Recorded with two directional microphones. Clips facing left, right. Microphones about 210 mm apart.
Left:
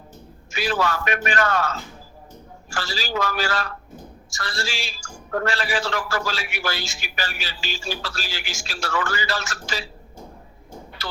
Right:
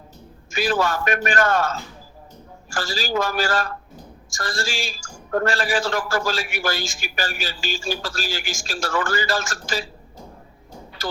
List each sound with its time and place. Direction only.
0.5 s a man's voice: 45° right (ahead or behind)
11.0 s music: 35° right (ahead or behind)